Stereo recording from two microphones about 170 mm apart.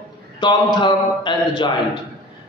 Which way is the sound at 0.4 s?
25° left (ahead or behind).